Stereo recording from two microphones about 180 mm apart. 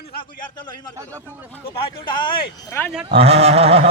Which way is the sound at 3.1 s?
35° right (ahead or behind).